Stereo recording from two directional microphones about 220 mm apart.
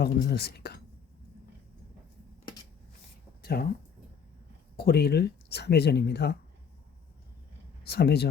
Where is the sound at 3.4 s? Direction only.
45° left (ahead or behind).